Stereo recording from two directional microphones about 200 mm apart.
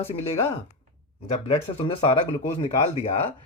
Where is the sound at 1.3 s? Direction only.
30° left (ahead or behind).